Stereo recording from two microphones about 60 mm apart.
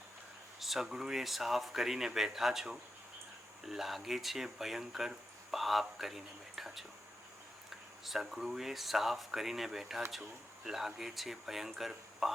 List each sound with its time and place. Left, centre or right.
0.6 s speech: centre
8.0 s speech: centre